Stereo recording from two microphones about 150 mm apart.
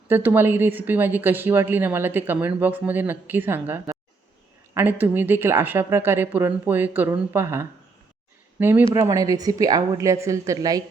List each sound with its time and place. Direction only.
0.1 s speech: 15° right (ahead or behind)
8.9 s a woman's voice: 25° right (ahead or behind)